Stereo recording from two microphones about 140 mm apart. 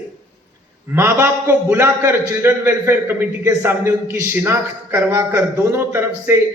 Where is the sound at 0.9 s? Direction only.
15° right (ahead or behind).